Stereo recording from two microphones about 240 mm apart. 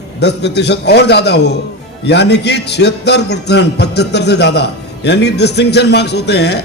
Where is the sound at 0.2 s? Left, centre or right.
Left.